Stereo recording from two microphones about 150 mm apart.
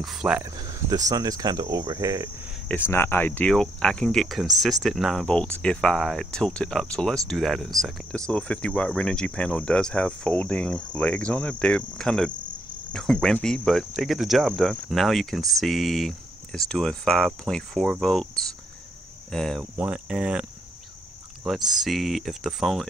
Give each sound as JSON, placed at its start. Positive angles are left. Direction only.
{"t": 0.0, "sound": "cricket", "side_deg": -5}
{"t": 0.6, "sound": "cricket", "side_deg": -25}
{"t": 2.7, "sound": "cricket", "side_deg": 15}
{"t": 7.2, "sound": "speech", "side_deg": 0}
{"t": 12.9, "sound": "cricket", "side_deg": 5}
{"t": 19.8, "sound": "cricket", "side_deg": -5}
{"t": 21.7, "sound": "cricket", "side_deg": 0}